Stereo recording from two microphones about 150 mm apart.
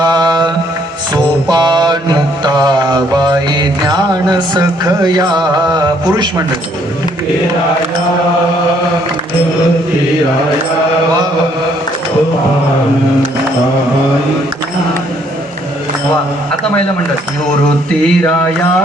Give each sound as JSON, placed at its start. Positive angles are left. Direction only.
{"t": 0.0, "sound": "mantra", "side_deg": -25}
{"t": 18.0, "sound": "speech", "side_deg": 10}